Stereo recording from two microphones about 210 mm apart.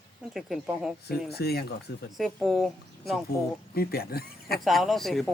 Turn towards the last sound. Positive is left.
turn(degrees=0)  # may be behind; listen again after turning